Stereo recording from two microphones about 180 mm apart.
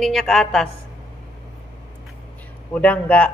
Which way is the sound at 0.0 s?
Centre (ahead or behind).